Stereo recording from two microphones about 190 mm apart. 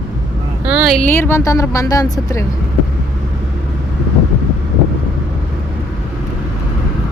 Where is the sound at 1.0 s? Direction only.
10° left (ahead or behind).